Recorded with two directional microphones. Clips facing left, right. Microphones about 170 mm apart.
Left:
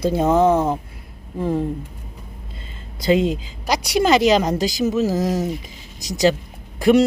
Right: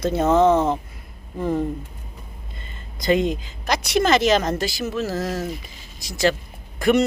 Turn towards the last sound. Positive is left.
turn(degrees=10)  # may be behind; listen again after turning